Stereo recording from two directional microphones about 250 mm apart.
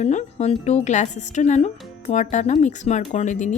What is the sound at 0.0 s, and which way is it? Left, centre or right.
A woman's voice, left.